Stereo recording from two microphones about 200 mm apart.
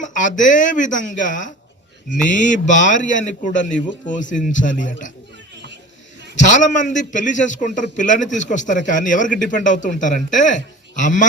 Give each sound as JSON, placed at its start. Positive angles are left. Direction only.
{"t": 0.0, "sound": "a man's voice", "side_deg": 40}
{"t": 6.3, "sound": "a man's voice", "side_deg": 40}